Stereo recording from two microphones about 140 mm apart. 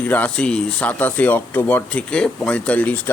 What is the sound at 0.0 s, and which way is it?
Speech, 10° left (ahead or behind).